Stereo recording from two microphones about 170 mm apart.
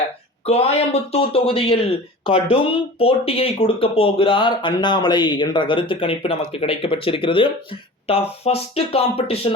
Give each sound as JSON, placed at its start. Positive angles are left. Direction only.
{"t": 0.4, "sound": "speech", "side_deg": 40}